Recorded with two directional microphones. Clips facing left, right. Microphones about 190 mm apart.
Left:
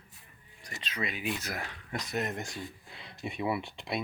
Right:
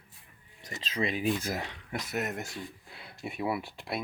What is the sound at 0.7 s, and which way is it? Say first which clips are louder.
Speech: right 5 dB; 30° right (ahead or behind).